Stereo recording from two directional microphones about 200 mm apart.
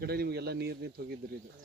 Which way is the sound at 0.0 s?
50° right (ahead or behind).